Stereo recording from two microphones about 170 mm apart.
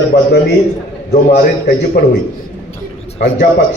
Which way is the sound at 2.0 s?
75° left (ahead or behind).